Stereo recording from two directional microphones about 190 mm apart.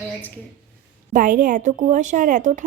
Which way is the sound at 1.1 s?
45° right (ahead or behind).